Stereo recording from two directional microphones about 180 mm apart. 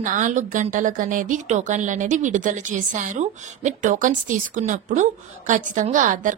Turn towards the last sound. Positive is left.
turn(degrees=-45)  # may be behind; listen again after turning